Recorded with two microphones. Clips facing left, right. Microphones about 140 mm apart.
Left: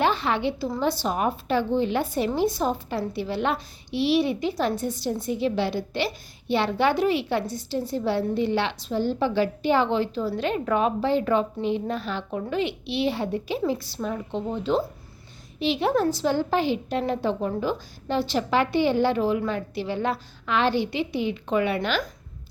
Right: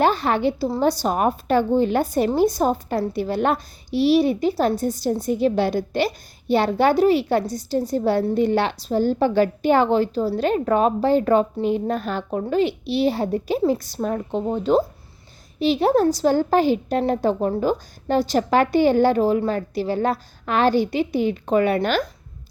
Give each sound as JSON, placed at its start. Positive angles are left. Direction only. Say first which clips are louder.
{"t": 0.0, "sound": "a woman's voice", "louder": "right 4 dB", "side_deg": -40}